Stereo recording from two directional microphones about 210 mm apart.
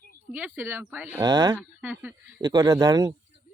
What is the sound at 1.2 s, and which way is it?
Speech, 20° right (ahead or behind).